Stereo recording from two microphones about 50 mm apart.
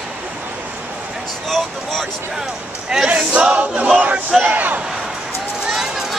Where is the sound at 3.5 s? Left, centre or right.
Right.